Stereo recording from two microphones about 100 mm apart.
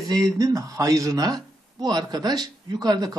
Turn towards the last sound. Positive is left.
turn(degrees=-40)  # may be behind; listen again after turning